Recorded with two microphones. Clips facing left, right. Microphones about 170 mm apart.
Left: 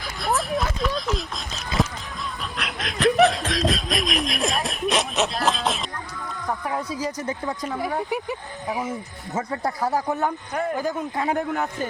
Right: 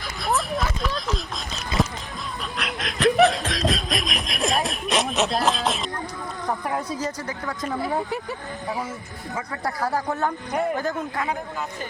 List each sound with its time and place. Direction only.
0.0 s vehicle: centre (ahead or behind)
1.7 s music: centre (ahead or behind)
2.6 s snicker: centre (ahead or behind)
7.2 s speech: 20° left (ahead or behind)
11.3 s a man's voice: 65° left (ahead or behind)